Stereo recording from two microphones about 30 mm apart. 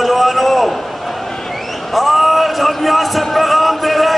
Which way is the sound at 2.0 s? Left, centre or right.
Centre.